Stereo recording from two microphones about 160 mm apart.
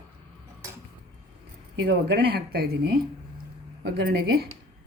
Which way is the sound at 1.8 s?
85° right.